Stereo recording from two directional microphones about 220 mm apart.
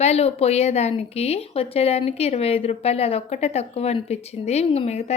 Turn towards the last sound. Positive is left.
turn(degrees=30)  # may be behind; listen again after turning